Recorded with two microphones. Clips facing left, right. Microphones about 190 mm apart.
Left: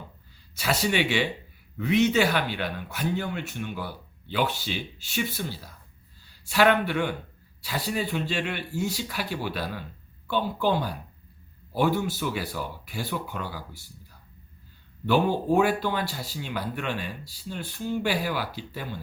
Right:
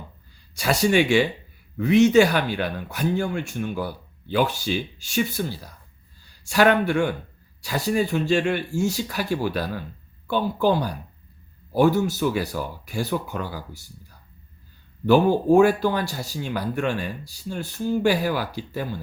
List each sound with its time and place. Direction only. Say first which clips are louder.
0.6 s speech: right 6 dB; 45° right (ahead or behind)
15.0 s speech: right 6 dB; 45° right (ahead or behind)